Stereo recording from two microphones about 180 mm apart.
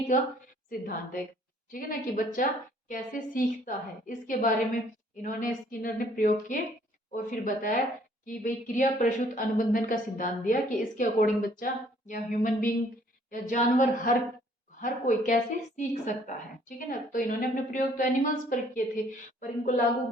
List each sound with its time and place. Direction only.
0.1 s speech: 45° left (ahead or behind)